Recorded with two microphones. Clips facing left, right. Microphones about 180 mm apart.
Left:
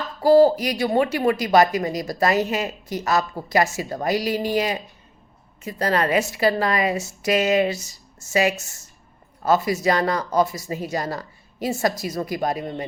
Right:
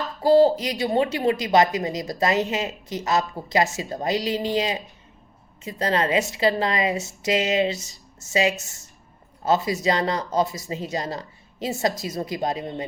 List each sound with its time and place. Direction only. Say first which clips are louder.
0.2 s speech: left 2 dB; 20° right (ahead or behind)